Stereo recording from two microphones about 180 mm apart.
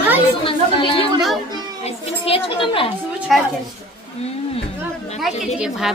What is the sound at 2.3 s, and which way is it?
Speech, 30° left (ahead or behind).